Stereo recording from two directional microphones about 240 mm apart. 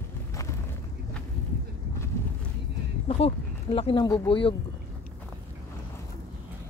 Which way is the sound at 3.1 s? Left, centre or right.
Left.